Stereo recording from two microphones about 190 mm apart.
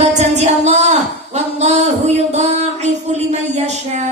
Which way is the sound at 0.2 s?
35° right (ahead or behind).